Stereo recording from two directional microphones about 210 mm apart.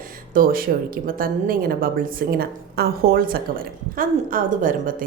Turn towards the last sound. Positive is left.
turn(degrees=-40)  # may be behind; listen again after turning